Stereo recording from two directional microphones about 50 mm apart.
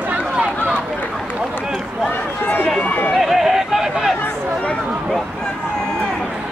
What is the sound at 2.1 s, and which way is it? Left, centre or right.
Run, left.